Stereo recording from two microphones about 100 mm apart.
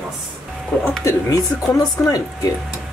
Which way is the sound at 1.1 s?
35° left (ahead or behind).